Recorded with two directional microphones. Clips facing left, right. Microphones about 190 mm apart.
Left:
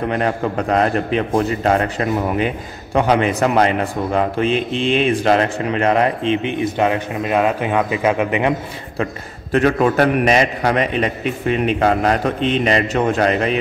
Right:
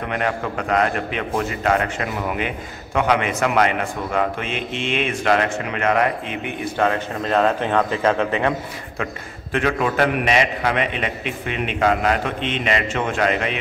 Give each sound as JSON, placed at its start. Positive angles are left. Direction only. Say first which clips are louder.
{"t": 0.1, "sound": "a man's voice", "louder": "left 4 dB", "side_deg": 35}
{"t": 8.9, "sound": "a man's voice", "louder": "left 6 dB", "side_deg": 35}